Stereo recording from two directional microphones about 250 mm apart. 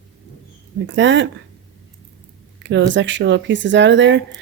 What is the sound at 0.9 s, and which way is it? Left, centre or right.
Speech, right.